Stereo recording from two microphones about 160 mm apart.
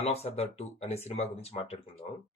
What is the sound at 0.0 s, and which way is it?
Speech, 40° left (ahead or behind).